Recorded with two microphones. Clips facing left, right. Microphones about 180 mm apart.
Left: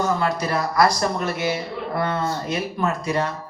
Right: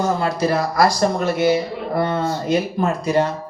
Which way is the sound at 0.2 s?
30° right (ahead or behind).